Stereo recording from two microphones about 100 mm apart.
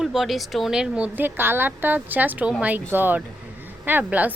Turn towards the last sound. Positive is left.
turn(degrees=-15)  # may be behind; listen again after turning